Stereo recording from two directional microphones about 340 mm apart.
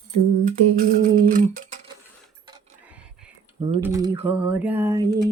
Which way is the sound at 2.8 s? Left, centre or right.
Centre.